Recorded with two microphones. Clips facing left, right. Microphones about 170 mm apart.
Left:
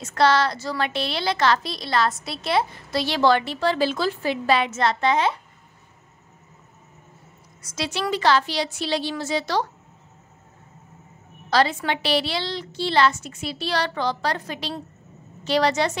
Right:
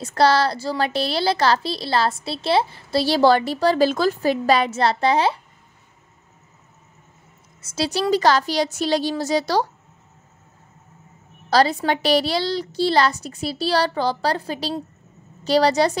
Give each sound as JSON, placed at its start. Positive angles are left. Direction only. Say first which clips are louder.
{"t": 0.0, "sound": "a woman's voice", "louder": "right 2 dB", "side_deg": -35}
{"t": 7.6, "sound": "a woman's voice", "louder": "right 5 dB", "side_deg": -35}
{"t": 11.5, "sound": "a woman's voice", "louder": "right 3 dB", "side_deg": -40}